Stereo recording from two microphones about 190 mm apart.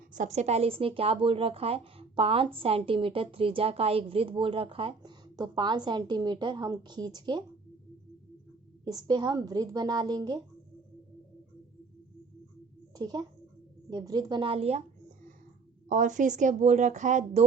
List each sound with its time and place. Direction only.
0.1 s a woman's voice: 40° right (ahead or behind); by 7.4 s 20° right (ahead or behind)
8.8 s a woman's voice: 20° right (ahead or behind)
13.0 s a woman's voice: 20° right (ahead or behind)
15.9 s a woman's voice: 40° right (ahead or behind)